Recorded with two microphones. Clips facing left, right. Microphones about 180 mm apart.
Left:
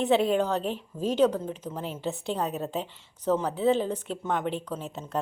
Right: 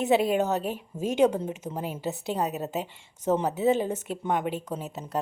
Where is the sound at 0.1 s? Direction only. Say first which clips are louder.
Right 1 dB; 10° right (ahead or behind).